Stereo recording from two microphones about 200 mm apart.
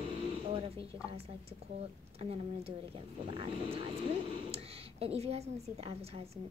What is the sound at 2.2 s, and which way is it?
Speech, 30° right (ahead or behind).